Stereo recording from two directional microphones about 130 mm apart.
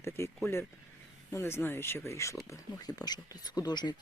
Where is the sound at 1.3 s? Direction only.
20° left (ahead or behind).